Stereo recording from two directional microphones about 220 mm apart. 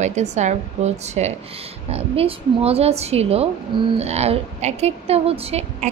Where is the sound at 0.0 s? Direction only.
30° right (ahead or behind).